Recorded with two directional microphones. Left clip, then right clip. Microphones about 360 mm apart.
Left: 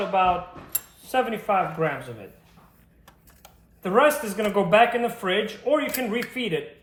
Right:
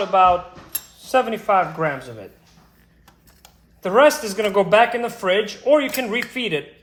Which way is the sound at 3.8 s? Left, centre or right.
Right.